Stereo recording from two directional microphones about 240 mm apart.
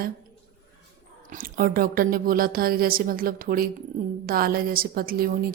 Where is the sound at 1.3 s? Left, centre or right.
Right.